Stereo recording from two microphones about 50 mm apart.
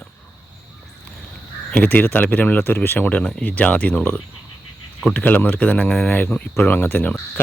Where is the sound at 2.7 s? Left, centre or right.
Left.